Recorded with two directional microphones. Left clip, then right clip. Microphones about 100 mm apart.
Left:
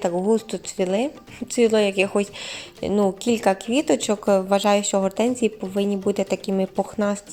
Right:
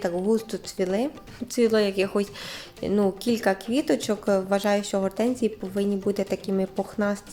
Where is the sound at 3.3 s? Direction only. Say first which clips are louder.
Left 4 dB; 20° left (ahead or behind).